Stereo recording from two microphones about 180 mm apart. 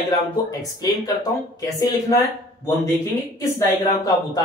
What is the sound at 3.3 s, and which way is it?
Speech, 20° left (ahead or behind).